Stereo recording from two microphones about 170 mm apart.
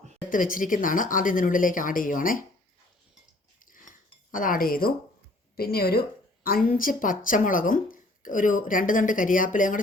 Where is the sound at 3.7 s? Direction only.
50° left (ahead or behind).